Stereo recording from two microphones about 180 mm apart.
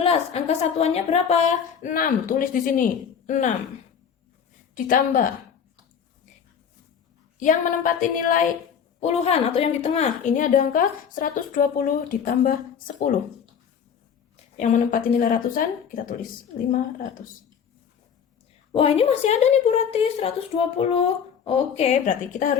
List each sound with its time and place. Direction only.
0.0 s a woman's voice: 35° left (ahead or behind)
4.7 s a woman's voice: 50° left (ahead or behind)
7.3 s a woman's voice: 45° left (ahead or behind)
9.0 s a woman's voice: 35° left (ahead or behind)
14.6 s a woman's voice: 45° left (ahead or behind)
16.7 s a woman's voice: 50° left (ahead or behind)
18.7 s a woman's voice: 30° left (ahead or behind)